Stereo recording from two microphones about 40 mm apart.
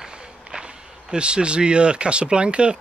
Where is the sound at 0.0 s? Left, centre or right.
Centre.